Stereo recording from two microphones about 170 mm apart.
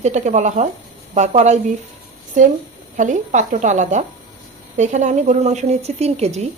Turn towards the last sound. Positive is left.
turn(degrees=-40)  # may be behind; listen again after turning